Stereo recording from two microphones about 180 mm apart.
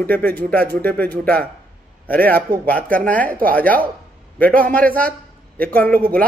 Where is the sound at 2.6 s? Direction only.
10° left (ahead or behind).